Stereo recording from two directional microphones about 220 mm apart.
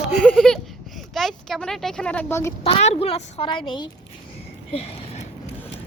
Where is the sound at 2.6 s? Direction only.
30° left (ahead or behind).